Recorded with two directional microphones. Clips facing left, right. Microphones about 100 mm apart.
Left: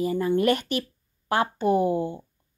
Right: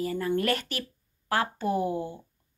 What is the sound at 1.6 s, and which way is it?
Speech, 55° left (ahead or behind).